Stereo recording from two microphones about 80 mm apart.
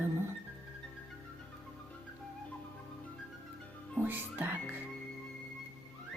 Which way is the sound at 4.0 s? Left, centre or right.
Right.